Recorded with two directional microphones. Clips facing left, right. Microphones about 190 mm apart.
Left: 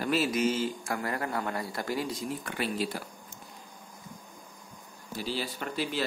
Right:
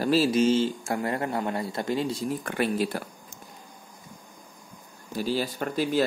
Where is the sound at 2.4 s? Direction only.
50° right (ahead or behind).